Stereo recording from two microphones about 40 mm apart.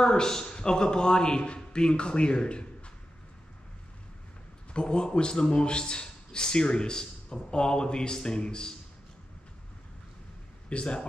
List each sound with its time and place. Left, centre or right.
0.0 s a man's voice: centre
4.7 s a man's voice: left
10.7 s a man's voice: left